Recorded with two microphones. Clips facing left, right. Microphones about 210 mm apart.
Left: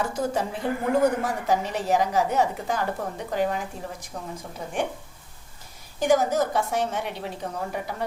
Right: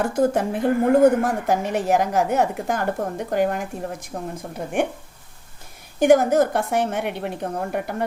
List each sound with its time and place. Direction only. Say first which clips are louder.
0.0 s a woman's voice: right 6 dB; 50° right (ahead or behind)
6.0 s a woman's voice: right 6 dB; 55° right (ahead or behind)